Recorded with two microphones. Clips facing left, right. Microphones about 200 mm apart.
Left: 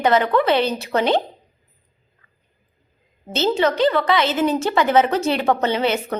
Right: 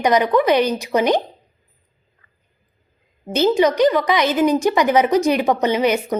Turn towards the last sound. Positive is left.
turn(degrees=-15)  # may be behind; listen again after turning